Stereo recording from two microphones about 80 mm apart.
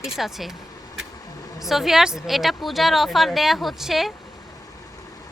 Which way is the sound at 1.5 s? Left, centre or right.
Centre.